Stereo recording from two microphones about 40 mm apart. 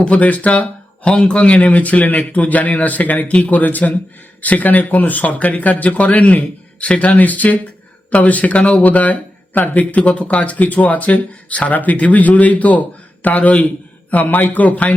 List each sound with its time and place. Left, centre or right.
0.2 s speech: left
1.1 s a man's voice: left
1.5 s speech: left
7.2 s speech: left